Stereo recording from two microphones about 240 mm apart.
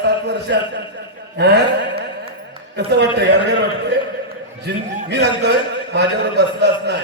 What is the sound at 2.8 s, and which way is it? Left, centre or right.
Speech, right.